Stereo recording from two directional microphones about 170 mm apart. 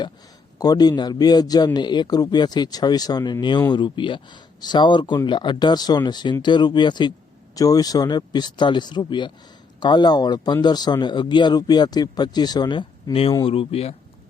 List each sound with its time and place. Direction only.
0.6 s speech: 25° left (ahead or behind)